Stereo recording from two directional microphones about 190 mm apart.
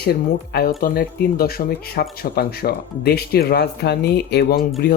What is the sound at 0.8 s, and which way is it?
Speech, 50° left (ahead or behind).